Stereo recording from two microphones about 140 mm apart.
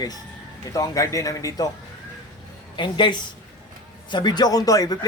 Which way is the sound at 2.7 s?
35° left (ahead or behind).